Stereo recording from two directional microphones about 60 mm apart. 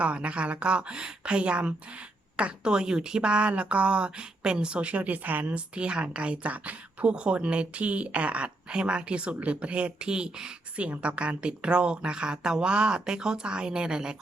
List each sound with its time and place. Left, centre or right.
0.0 s a woman's voice: right